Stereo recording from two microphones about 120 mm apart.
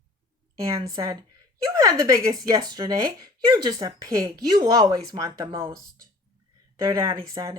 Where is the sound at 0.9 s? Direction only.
30° right (ahead or behind).